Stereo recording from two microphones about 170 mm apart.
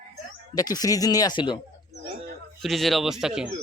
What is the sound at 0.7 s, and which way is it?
Speech, 20° left (ahead or behind).